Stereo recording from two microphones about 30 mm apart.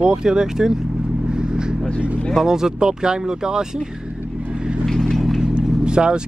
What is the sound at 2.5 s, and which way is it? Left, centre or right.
Speech, right.